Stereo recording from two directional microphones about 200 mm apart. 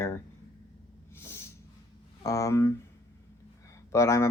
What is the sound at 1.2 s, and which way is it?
Snort, 15° left (ahead or behind).